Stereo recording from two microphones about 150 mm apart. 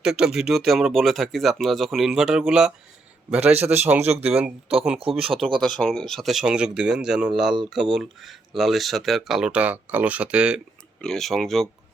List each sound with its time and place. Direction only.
0.0 s a man's voice: 5° right (ahead or behind)
4.9 s speech: 40° right (ahead or behind)
5.2 s speech: centre (ahead or behind)
11.0 s speech: 5° left (ahead or behind)